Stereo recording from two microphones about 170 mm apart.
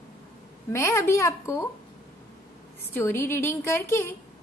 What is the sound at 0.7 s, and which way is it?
Speech, 15° left (ahead or behind).